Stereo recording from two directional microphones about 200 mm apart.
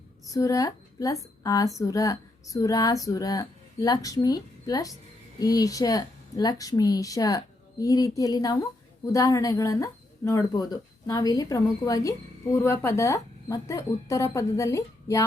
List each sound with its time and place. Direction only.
0.3 s a woman's voice: 15° left (ahead or behind)